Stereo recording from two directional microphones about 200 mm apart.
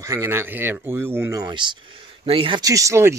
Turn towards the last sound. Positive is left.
turn(degrees=-15)  # may be behind; listen again after turning